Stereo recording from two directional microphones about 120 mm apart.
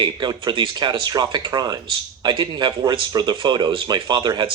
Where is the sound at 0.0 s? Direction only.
35° right (ahead or behind).